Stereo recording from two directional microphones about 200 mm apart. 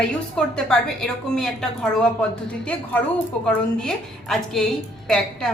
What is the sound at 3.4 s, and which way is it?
A woman's voice, 5° left (ahead or behind).